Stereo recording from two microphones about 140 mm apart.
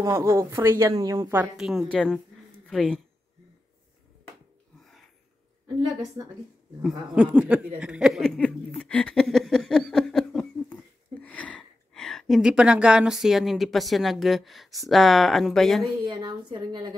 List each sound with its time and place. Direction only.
0.0 s speech: 20° right (ahead or behind)
1.4 s speech: 5° right (ahead or behind)
6.8 s speech: 10° right (ahead or behind)
8.5 s a sound: 5° left (ahead or behind)
14.9 s speech: centre (ahead or behind)
16.0 s a woman's voice: 30° right (ahead or behind)